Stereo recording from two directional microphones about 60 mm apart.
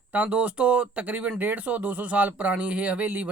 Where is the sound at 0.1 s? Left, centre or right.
Right.